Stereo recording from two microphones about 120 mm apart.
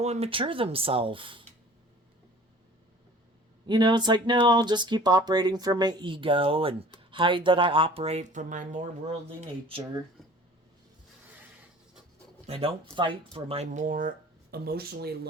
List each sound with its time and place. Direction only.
0.0 s speech: 60° right (ahead or behind); by 1.5 s 45° right (ahead or behind)
3.7 s speech: 40° right (ahead or behind); by 8.9 s 90° right
9.6 s speech: 45° right (ahead or behind)
12.5 s speech: 55° right (ahead or behind)
13.6 s speech: 90° right